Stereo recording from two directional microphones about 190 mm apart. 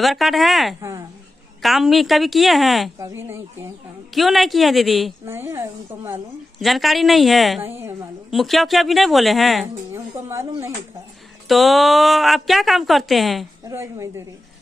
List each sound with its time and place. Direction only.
0.0 s a woman's voice: centre (ahead or behind)
0.7 s a woman's voice: 15° right (ahead or behind)
1.6 s a woman's voice: centre (ahead or behind)
3.0 s a woman's voice: 10° right (ahead or behind)
4.1 s a woman's voice: centre (ahead or behind)
5.2 s a woman's voice: 10° right (ahead or behind)
6.6 s a woman's voice: centre (ahead or behind)
7.6 s a woman's voice: 10° right (ahead or behind)
8.3 s a woman's voice: centre (ahead or behind)
9.9 s a woman's voice: 15° right (ahead or behind)
11.4 s a woman's voice: centre (ahead or behind)
13.7 s a woman's voice: 15° right (ahead or behind)